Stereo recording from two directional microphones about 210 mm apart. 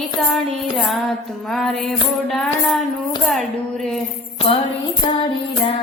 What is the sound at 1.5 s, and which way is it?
Music, centre (ahead or behind).